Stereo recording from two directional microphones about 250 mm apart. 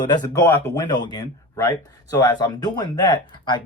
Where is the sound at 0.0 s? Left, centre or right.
Centre.